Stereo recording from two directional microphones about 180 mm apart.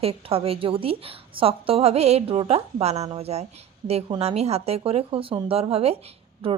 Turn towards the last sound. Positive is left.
turn(degrees=-35)  # may be behind; listen again after turning